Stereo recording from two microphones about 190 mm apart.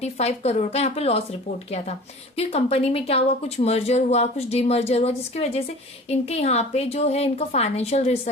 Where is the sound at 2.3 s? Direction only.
30° left (ahead or behind).